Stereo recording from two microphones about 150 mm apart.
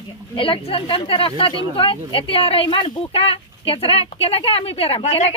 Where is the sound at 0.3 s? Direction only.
35° left (ahead or behind).